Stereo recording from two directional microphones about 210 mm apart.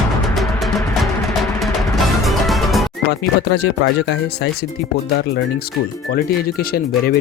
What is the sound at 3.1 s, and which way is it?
Speech, 50° left (ahead or behind).